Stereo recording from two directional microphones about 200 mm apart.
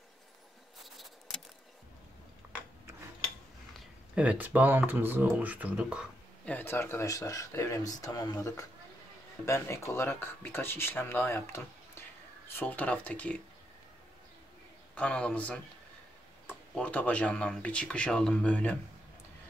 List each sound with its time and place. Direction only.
0.8 s a sound: centre (ahead or behind)
3.7 s speech: 5° right (ahead or behind)
6.4 s speech: 10° left (ahead or behind)
15.0 s speech: 5° left (ahead or behind)